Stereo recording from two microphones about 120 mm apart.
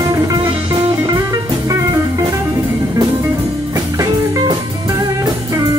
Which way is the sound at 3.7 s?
30° right (ahead or behind).